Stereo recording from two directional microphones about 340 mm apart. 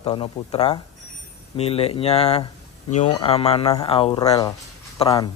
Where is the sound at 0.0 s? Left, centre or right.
Centre.